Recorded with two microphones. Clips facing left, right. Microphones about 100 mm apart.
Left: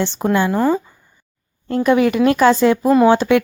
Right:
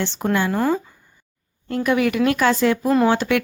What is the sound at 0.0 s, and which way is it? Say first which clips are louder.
Speech: left 4 dB; 15° left (ahead or behind).